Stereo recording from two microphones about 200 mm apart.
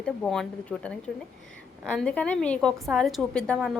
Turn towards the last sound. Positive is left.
turn(degrees=5)  # may be behind; listen again after turning